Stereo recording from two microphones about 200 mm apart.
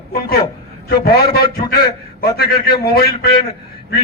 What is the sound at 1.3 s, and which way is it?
A man's voice, 50° left (ahead or behind).